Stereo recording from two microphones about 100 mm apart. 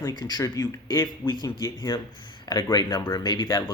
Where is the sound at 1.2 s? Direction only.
25° left (ahead or behind).